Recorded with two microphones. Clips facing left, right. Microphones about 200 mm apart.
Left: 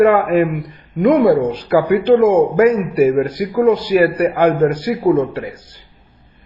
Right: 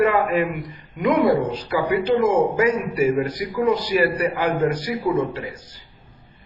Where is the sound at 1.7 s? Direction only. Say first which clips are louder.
Left 8 dB; 60° left (ahead or behind).